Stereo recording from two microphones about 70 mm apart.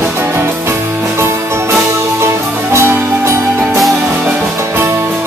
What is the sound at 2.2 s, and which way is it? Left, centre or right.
Music, right.